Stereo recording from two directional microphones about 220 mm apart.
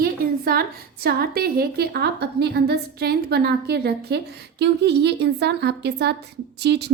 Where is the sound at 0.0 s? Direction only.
45° right (ahead or behind).